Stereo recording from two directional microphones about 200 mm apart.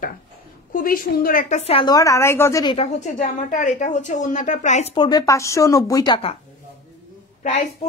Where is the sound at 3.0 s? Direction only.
40° left (ahead or behind).